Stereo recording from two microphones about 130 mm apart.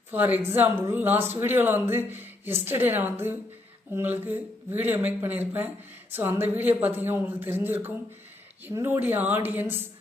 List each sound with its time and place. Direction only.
0.1 s a woman's voice: 15° right (ahead or behind)